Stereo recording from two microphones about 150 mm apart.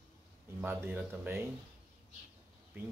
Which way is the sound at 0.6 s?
10° right (ahead or behind).